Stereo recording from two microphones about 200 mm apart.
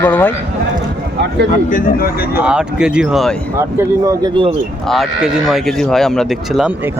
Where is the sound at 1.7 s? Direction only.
45° left (ahead or behind).